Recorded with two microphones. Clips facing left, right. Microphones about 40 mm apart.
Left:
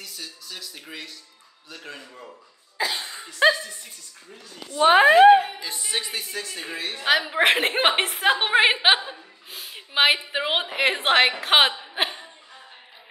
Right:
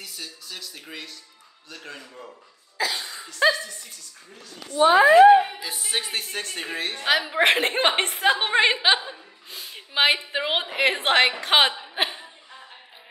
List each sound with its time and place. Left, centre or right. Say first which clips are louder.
0.0 s a sound: even; centre
1.7 s a woman's voice: even; centre
2.8 s cough: even; centre
3.4 s speech: left 2 dB; left
4.8 s speech: even; left
5.6 s a woman's voice: even; centre
6.0 s a woman's voice: right 1 dB; right
7.1 s a woman's voice: left 1 dB; centre
11.8 s chuckle: even; centre